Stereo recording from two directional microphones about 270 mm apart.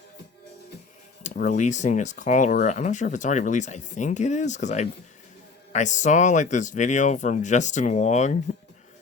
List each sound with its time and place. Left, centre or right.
1.2 s speech: left